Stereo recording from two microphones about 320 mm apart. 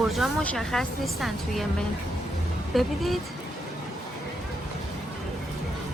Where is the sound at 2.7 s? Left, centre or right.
Centre.